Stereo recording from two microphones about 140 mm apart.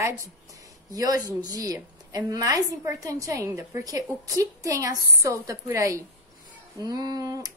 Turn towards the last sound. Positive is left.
turn(degrees=-25)  # may be behind; listen again after turning